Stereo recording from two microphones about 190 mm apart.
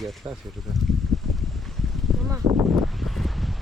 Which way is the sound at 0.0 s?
Centre (ahead or behind).